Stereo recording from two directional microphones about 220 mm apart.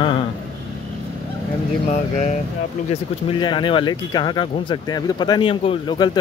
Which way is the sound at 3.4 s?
20° left (ahead or behind).